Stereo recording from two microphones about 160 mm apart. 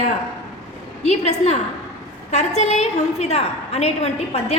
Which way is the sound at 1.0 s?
45° left (ahead or behind).